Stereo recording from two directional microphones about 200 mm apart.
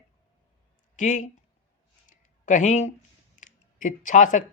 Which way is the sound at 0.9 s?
40° left (ahead or behind).